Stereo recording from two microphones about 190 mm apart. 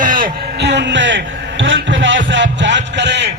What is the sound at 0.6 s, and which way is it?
A man's voice, 65° right (ahead or behind).